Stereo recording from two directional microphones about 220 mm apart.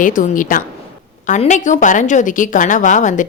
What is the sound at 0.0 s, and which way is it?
A woman's voice, 35° left (ahead or behind).